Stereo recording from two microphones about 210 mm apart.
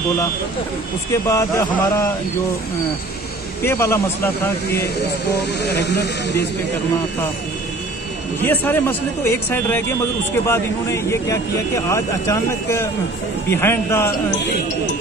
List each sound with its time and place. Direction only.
1.1 s speech: 15° left (ahead or behind)
3.6 s speech: 10° left (ahead or behind)
5.6 s speech: 55° left (ahead or behind)
8.4 s speech: 10° left (ahead or behind)